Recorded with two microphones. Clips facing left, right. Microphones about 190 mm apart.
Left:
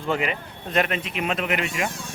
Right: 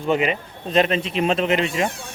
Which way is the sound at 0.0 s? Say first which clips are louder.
Right 5 dB; 20° right (ahead or behind).